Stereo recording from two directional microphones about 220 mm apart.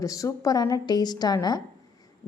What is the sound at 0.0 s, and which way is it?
A woman's voice, 15° left (ahead or behind).